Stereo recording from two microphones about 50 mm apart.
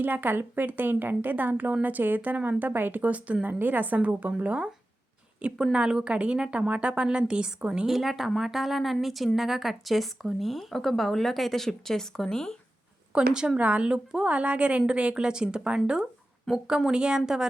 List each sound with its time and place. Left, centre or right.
0.0 s a woman's voice: right; by 7.7 s centre
7.9 s a woman's voice: centre
13.1 s a woman's voice: centre